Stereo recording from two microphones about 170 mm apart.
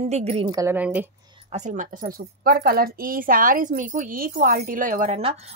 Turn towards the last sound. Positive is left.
turn(degrees=-50)  # may be behind; listen again after turning